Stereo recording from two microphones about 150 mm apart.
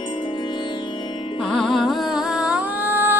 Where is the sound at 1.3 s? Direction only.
5° left (ahead or behind); by 3.1 s 15° right (ahead or behind).